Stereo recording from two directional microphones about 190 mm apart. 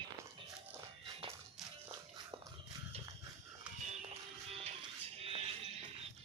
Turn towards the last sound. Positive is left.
turn(degrees=-30)  # may be behind; listen again after turning